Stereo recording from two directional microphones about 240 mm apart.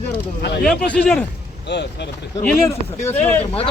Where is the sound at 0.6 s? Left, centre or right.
Centre.